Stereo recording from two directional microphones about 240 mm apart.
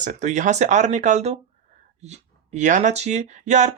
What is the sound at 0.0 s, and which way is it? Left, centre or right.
Speech, right.